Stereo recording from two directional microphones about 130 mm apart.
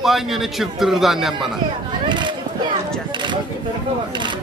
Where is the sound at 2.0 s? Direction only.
35° right (ahead or behind).